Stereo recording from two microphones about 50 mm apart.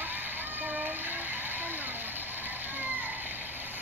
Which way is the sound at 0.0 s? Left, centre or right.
Right.